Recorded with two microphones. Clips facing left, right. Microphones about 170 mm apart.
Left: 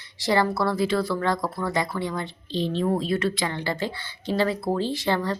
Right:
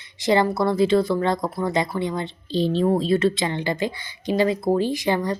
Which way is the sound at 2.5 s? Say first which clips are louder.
Right 4 dB; 35° right (ahead or behind).